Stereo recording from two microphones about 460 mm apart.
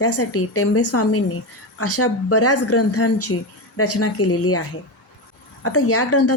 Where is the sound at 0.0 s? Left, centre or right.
Left.